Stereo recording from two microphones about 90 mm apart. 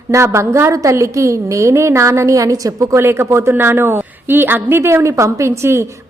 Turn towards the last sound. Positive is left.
turn(degrees=-30)  # may be behind; listen again after turning